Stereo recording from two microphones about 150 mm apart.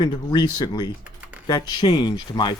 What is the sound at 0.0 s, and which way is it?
Speech, 30° left (ahead or behind).